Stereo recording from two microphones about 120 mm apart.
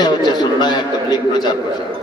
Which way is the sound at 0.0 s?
35° left (ahead or behind).